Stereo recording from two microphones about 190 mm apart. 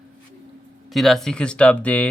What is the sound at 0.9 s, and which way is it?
A man's voice, centre (ahead or behind).